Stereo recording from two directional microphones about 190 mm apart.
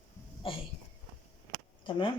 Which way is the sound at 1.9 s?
25° left (ahead or behind).